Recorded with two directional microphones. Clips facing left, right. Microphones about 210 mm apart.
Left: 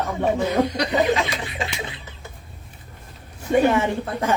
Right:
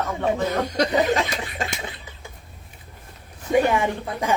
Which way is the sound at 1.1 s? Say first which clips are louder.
Even; 45° right (ahead or behind).